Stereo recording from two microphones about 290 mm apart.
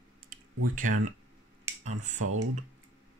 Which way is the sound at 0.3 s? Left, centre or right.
Right.